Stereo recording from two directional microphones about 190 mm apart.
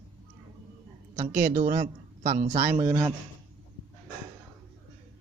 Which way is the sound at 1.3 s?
50° right (ahead or behind).